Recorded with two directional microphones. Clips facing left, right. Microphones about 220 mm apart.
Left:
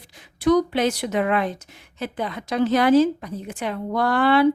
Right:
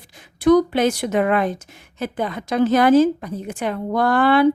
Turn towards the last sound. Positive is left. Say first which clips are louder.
# right 2 dB
turn(degrees=-50)  # may be behind; listen again after turning